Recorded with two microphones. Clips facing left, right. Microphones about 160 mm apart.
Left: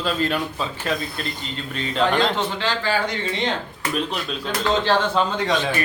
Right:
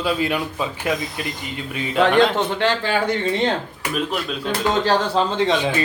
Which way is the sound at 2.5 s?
60° right (ahead or behind).